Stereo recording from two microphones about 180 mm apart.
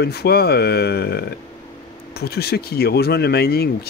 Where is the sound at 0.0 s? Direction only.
65° left (ahead or behind).